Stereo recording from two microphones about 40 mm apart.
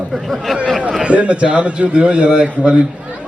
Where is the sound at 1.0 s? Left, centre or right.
Right.